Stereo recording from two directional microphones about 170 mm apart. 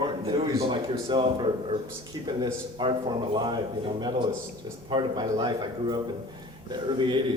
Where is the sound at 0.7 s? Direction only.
30° right (ahead or behind).